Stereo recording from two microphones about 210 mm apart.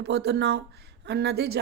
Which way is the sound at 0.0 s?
50° right (ahead or behind).